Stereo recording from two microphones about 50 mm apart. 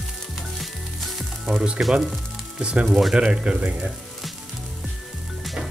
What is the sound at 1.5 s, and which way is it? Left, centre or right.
Speech, centre.